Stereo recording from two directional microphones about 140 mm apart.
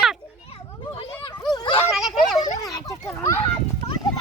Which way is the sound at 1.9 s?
Centre (ahead or behind).